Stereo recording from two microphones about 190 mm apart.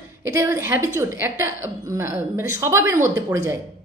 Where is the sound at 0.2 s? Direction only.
15° right (ahead or behind).